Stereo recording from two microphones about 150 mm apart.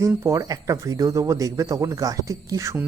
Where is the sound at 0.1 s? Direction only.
15° right (ahead or behind).